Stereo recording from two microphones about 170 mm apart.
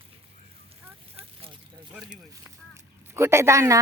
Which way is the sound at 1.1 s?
35° right (ahead or behind).